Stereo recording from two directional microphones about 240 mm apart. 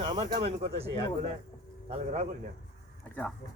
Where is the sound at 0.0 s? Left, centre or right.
Right.